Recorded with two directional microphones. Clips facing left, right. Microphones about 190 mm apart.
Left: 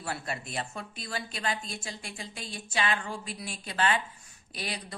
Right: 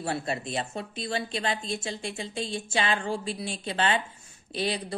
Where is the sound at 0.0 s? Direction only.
25° right (ahead or behind).